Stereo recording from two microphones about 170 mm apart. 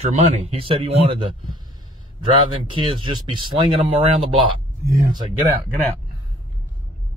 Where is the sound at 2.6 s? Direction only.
30° right (ahead or behind).